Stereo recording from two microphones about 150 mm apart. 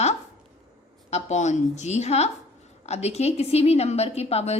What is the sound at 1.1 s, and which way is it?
A woman's voice, 50° left (ahead or behind).